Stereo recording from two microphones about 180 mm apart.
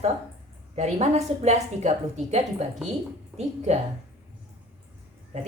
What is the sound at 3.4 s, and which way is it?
Speech, 40° right (ahead or behind).